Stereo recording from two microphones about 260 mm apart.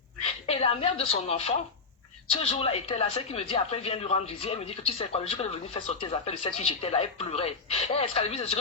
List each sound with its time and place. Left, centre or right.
0.4 s a woman's voice: left